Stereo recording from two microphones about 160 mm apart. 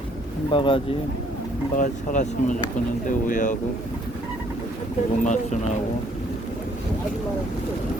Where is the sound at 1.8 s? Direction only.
50° left (ahead or behind).